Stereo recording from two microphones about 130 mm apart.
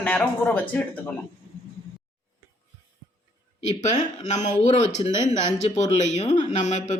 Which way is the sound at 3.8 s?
65° left (ahead or behind).